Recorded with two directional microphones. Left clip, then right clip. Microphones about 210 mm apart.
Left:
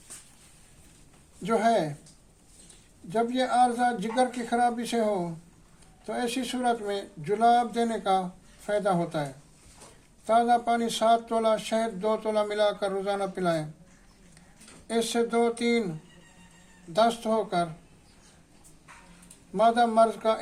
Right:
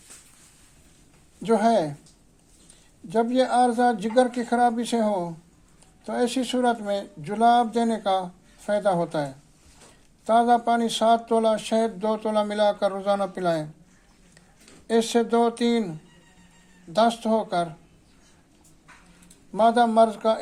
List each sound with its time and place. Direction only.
1.4 s speech: 30° right (ahead or behind)
3.1 s speech: 30° right (ahead or behind)
14.8 s speech: 30° right (ahead or behind)
16.9 s speech: 30° right (ahead or behind)
19.5 s speech: 30° right (ahead or behind)